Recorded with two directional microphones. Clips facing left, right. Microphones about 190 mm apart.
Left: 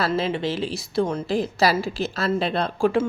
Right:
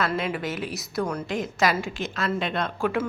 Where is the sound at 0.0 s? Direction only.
25° left (ahead or behind).